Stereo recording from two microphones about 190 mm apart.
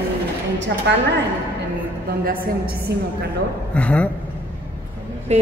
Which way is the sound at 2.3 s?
50° right (ahead or behind).